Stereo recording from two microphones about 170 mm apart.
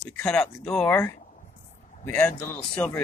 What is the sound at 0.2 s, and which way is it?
Speech, 5° left (ahead or behind).